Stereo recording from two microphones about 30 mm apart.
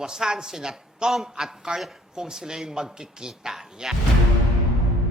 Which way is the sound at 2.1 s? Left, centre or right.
Right.